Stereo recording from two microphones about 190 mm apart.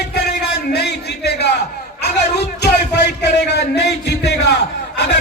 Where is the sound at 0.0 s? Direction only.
60° left (ahead or behind).